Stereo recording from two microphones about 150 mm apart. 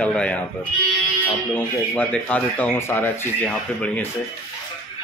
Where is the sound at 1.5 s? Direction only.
10° left (ahead or behind).